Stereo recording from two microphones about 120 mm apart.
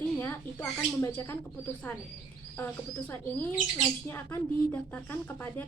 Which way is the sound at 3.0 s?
15° left (ahead or behind).